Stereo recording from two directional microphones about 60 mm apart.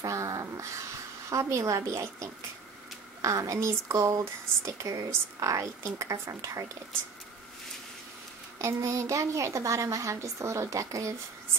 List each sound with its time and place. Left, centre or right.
0.0 s a sound: right
1.3 s a woman's voice: right
8.5 s a woman's voice: right